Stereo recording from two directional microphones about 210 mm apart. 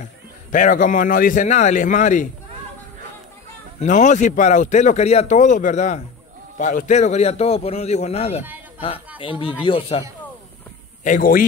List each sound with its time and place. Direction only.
0.5 s speech: 40° left (ahead or behind)
3.8 s speech: 35° left (ahead or behind)
11.1 s speech: 40° left (ahead or behind)